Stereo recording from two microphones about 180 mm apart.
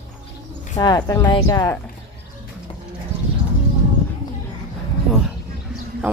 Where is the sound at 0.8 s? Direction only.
20° left (ahead or behind).